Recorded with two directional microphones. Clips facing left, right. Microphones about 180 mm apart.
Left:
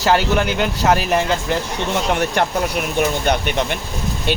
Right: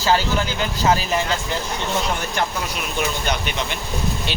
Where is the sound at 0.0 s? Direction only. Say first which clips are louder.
Left 3 dB; 65° left (ahead or behind).